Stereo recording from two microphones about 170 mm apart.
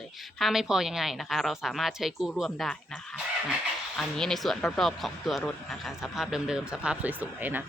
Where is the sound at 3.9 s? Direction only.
5° left (ahead or behind).